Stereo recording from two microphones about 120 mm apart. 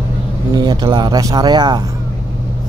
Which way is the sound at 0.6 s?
35° right (ahead or behind).